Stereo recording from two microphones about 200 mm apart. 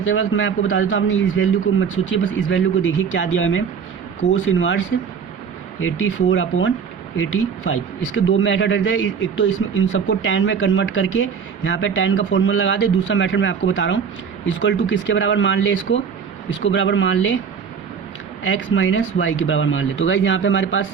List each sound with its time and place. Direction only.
0.0 s a man's voice: 75° left (ahead or behind)
18.4 s a man's voice: 70° left (ahead or behind)